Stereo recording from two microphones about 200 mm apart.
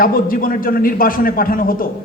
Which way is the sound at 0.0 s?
45° left (ahead or behind).